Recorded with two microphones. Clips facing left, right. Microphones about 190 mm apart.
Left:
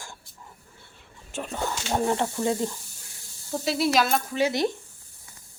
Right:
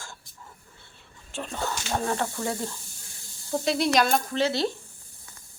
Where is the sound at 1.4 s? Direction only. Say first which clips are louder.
Left 1 dB; 15° left (ahead or behind).